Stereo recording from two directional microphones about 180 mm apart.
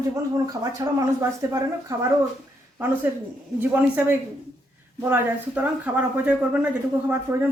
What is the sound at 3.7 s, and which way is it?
Speech, 10° right (ahead or behind).